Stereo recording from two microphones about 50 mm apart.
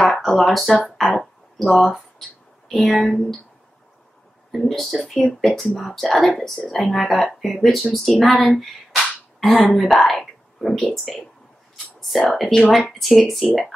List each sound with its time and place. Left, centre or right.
0.0 s speech: centre
1.2 s a sound: centre
2.7 s speech: centre
4.5 s a woman's voice: centre
11.7 s a sound: centre
13.0 s speech: centre